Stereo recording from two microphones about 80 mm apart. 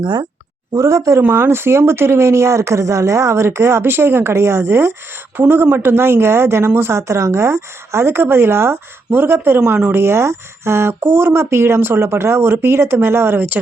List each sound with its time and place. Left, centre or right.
0.0 s speech: right
0.7 s speech: right
1.2 s speech: right
10.0 s speech: right